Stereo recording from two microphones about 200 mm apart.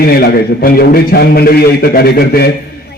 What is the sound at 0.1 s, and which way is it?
A man's voice, 50° left (ahead or behind).